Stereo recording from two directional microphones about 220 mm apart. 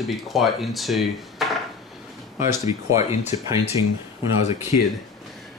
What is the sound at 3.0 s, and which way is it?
Speech, 30° left (ahead or behind).